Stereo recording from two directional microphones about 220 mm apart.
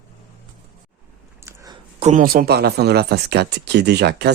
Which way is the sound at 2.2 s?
45° right (ahead or behind).